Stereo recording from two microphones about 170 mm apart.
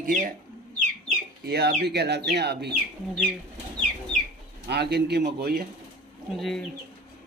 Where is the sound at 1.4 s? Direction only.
70° right (ahead or behind).